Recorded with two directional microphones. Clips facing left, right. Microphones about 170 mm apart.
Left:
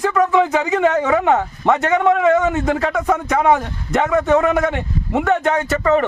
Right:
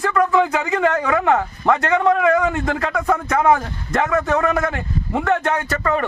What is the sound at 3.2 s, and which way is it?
Speech, 10° left (ahead or behind).